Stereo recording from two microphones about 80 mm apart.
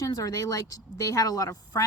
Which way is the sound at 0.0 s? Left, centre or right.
Left.